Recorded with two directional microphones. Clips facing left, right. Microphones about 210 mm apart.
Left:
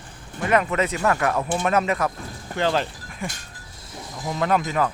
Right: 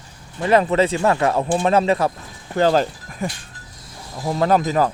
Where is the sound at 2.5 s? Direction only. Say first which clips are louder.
Right 6 dB; 40° right (ahead or behind).